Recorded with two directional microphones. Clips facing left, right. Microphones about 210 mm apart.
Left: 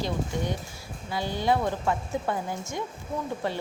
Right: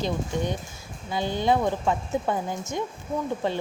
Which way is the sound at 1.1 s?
20° right (ahead or behind).